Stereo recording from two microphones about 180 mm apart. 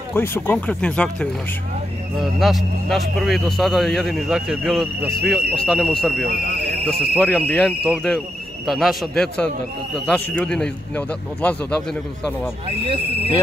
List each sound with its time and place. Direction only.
0.1 s a man's voice: 10° left (ahead or behind)
2.4 s speech: centre (ahead or behind)
6.2 s speech: 60° right (ahead or behind)
6.9 s a man's voice: 10° left (ahead or behind)
12.6 s speech: 30° right (ahead or behind)